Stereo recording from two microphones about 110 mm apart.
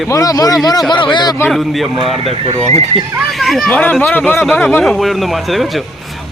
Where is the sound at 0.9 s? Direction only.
45° left (ahead or behind).